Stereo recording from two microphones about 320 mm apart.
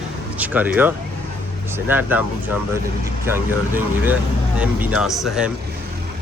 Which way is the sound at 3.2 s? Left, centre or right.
Centre.